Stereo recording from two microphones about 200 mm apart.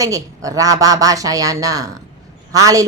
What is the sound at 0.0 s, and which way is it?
A woman's voice, 15° right (ahead or behind).